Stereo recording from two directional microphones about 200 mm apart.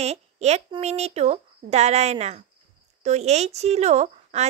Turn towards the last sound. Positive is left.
turn(degrees=-35)  # may be behind; listen again after turning